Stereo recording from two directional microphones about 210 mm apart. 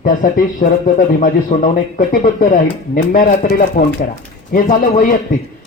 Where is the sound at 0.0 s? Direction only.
40° left (ahead or behind).